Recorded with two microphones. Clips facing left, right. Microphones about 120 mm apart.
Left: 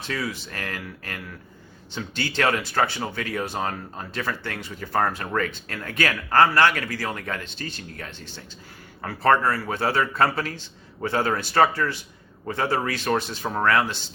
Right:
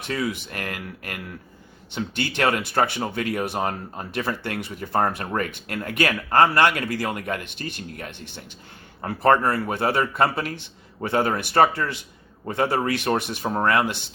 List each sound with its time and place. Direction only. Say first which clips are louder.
0.1 s speech: right 3 dB; 20° right (ahead or behind)